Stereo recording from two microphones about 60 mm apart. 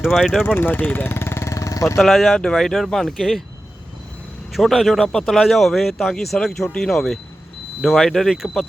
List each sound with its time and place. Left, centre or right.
0.0 s speech: centre
0.4 s speech: left
2.0 s speech: centre
4.5 s speech: centre